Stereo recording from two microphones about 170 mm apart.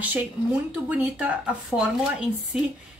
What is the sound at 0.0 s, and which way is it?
A woman's voice, 10° right (ahead or behind).